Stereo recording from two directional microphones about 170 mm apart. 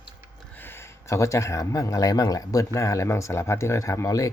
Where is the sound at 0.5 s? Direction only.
10° left (ahead or behind).